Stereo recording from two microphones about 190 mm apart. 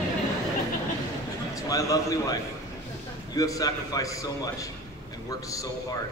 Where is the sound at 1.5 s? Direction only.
15° left (ahead or behind).